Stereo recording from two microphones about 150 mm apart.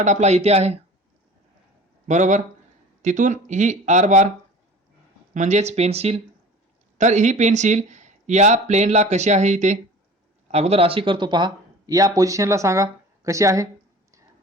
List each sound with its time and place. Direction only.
0.0 s speech: 50° right (ahead or behind)
2.0 s speech: 55° right (ahead or behind)
5.3 s speech: 50° right (ahead or behind); by 13.7 s 20° right (ahead or behind)